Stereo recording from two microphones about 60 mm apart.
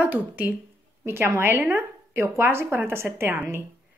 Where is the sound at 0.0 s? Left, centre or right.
Right.